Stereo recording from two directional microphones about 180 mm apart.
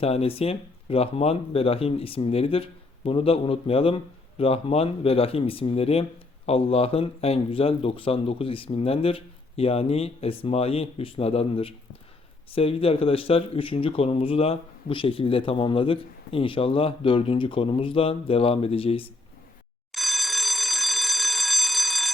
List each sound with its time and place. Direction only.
0.0 s speech: 35° left (ahead or behind)
19.9 s alarm: centre (ahead or behind)